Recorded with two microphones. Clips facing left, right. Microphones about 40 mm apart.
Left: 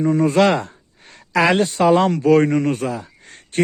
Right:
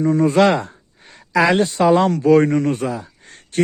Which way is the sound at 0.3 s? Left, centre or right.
Centre.